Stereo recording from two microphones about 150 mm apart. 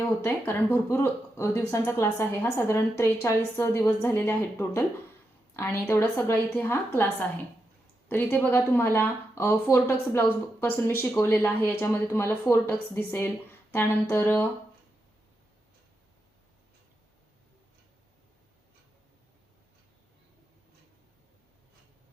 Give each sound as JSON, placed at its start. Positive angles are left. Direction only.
{"t": 0.2, "sound": "speech", "side_deg": 15}